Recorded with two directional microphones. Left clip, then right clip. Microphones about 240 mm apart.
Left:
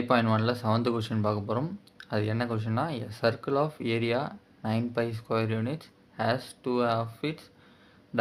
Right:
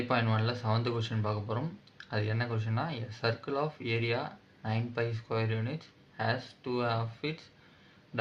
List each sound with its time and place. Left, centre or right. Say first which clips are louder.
0.1 s speech: left 7 dB; left